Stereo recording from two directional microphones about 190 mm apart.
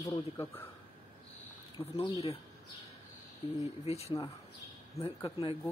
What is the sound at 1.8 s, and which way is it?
Speech, 15° left (ahead or behind).